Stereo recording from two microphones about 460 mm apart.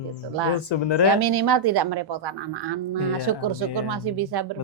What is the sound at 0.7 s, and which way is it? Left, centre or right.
Speech, left.